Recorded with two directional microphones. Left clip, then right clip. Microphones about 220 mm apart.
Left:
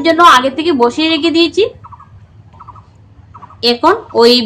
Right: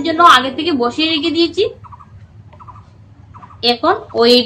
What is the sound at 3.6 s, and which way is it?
Speech, 45° left (ahead or behind).